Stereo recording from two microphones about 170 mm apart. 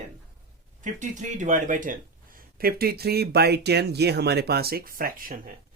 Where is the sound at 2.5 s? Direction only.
65° right (ahead or behind).